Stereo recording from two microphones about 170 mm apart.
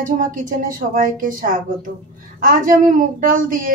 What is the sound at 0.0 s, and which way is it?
Speech, 50° right (ahead or behind).